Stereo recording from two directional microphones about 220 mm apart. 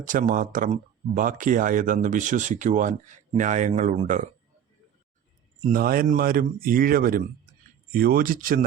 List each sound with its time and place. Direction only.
0.0 s speech: 35° right (ahead or behind)
5.5 s speech: 35° right (ahead or behind)